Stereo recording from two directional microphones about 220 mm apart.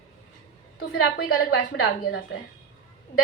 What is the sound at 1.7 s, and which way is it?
Speech, 60° left (ahead or behind).